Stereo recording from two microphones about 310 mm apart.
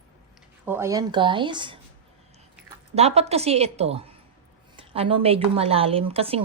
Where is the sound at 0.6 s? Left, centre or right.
Centre.